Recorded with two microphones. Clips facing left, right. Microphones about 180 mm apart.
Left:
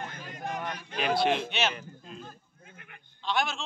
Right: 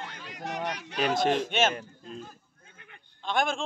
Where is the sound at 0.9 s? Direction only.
40° right (ahead or behind).